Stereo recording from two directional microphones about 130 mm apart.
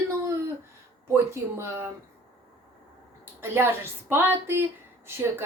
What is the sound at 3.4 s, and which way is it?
Speech, 15° right (ahead or behind).